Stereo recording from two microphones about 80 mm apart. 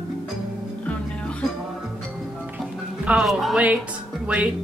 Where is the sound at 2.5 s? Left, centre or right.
Centre.